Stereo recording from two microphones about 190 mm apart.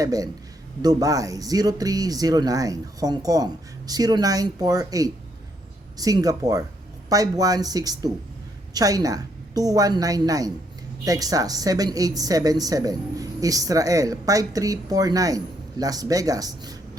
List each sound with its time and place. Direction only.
0.0 s speech: 20° right (ahead or behind)